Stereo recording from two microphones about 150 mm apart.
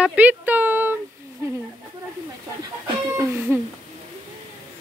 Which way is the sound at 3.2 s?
15° right (ahead or behind).